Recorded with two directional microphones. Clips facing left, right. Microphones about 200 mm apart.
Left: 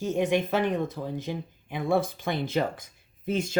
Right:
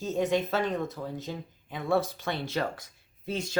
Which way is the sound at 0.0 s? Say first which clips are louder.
Left 2 dB; 15° left (ahead or behind).